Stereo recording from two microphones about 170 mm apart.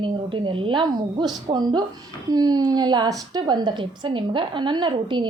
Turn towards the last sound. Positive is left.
turn(degrees=-30)  # may be behind; listen again after turning